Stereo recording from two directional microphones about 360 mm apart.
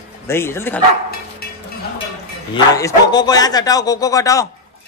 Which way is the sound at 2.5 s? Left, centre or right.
Centre.